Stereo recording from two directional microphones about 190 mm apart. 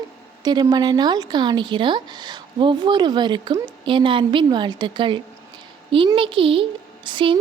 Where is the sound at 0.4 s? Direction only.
20° right (ahead or behind).